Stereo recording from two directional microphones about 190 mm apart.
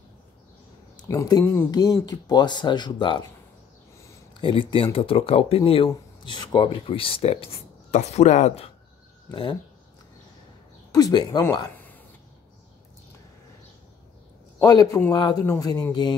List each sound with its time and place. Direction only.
1.0 s speech: 15° left (ahead or behind)
4.3 s speech: 25° left (ahead or behind)
9.3 s speech: 25° left (ahead or behind)
10.9 s speech: 20° left (ahead or behind)
14.6 s speech: 20° left (ahead or behind)